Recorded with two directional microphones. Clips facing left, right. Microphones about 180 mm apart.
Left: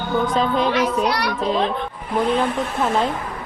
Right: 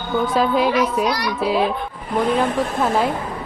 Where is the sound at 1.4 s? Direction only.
5° right (ahead or behind).